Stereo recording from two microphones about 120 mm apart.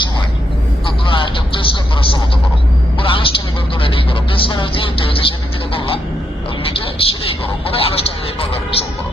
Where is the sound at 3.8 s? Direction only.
50° left (ahead or behind).